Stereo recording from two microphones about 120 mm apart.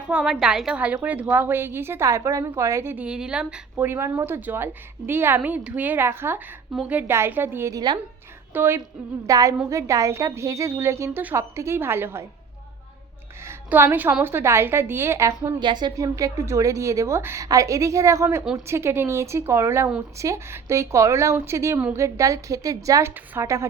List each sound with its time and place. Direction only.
0.1 s a woman's voice: 5° right (ahead or behind)
3.8 s a woman's voice: 20° right (ahead or behind)
8.5 s a woman's voice: 20° right (ahead or behind)
9.2 s a woman's voice: 30° right (ahead or behind)
13.4 s a woman's voice: 20° right (ahead or behind)
15.6 s a woman's voice: 40° right (ahead or behind)